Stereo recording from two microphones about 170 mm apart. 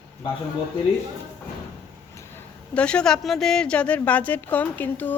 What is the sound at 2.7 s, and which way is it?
A woman's voice, 5° left (ahead or behind).